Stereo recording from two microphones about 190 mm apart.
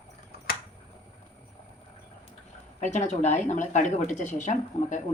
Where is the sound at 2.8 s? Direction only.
40° left (ahead or behind).